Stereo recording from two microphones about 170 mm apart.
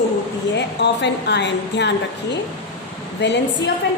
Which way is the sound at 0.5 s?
90° left.